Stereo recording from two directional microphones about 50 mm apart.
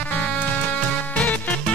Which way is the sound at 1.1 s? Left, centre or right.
Left.